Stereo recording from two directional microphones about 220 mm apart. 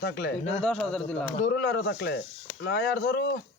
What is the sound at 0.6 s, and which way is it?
Speech, 5° left (ahead or behind).